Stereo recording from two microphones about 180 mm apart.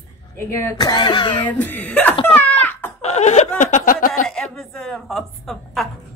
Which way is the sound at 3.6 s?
45° left (ahead or behind).